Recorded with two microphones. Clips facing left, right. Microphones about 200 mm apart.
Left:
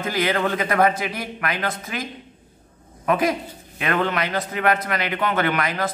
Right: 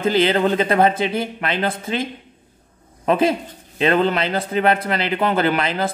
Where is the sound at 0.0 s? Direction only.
25° right (ahead or behind).